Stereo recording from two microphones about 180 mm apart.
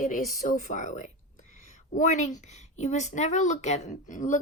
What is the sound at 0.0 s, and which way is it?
A woman's voice, 40° left (ahead or behind).